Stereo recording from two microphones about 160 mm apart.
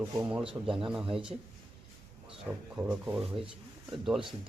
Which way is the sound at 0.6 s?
30° right (ahead or behind).